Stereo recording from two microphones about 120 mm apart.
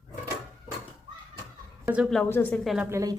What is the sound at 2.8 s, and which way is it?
Speech, 25° right (ahead or behind).